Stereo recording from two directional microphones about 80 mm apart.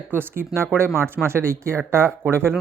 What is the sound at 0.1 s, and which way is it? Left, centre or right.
Speech, right.